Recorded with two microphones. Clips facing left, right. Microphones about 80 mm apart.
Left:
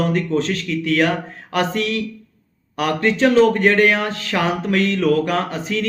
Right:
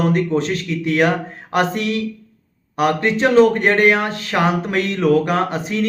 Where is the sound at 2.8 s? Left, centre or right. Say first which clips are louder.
Even; right.